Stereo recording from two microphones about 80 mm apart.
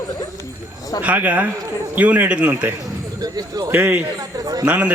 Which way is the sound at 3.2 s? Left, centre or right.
Right.